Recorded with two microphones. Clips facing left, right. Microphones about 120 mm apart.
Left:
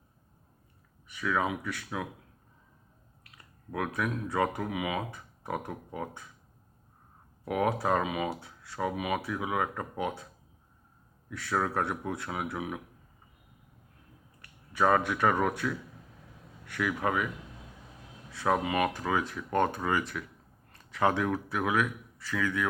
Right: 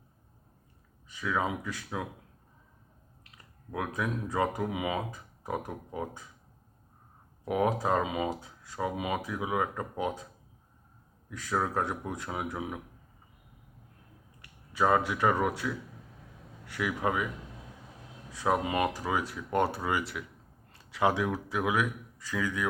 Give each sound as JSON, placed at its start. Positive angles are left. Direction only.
{"t": 1.1, "sound": "speech", "side_deg": -20}
{"t": 3.7, "sound": "speech", "side_deg": -20}
{"t": 7.4, "sound": "speech", "side_deg": -25}
{"t": 8.3, "sound": "speech", "side_deg": -15}
{"t": 11.3, "sound": "speech", "side_deg": -20}
{"t": 14.8, "sound": "speech", "side_deg": -20}
{"t": 16.7, "sound": "speech", "side_deg": -20}
{"t": 18.3, "sound": "speech", "side_deg": -15}
{"t": 18.9, "sound": "speech", "side_deg": -10}